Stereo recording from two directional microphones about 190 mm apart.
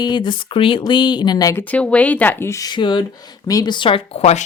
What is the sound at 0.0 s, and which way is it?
Speech, 25° left (ahead or behind).